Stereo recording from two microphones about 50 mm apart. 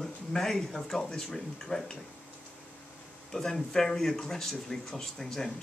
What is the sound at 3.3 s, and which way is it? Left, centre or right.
Speech, centre.